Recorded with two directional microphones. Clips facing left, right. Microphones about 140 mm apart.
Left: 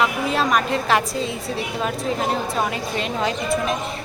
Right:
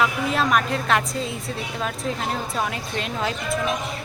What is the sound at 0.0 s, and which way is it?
Speech, centre (ahead or behind).